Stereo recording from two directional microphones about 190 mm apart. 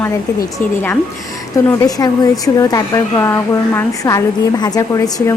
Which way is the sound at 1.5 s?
20° left (ahead or behind).